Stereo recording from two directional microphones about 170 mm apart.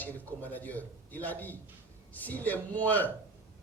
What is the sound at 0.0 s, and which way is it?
Speech, 10° left (ahead or behind).